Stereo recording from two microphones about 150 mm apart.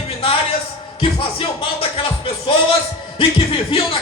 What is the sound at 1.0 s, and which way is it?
A man's voice, 40° left (ahead or behind).